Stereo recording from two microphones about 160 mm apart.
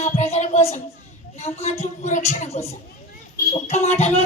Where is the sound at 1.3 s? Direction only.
40° left (ahead or behind).